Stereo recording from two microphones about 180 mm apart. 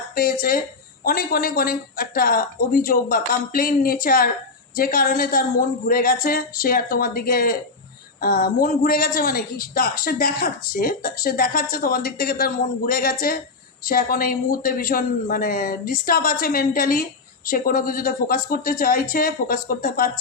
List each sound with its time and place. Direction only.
0.1 s a woman's voice: 50° left (ahead or behind)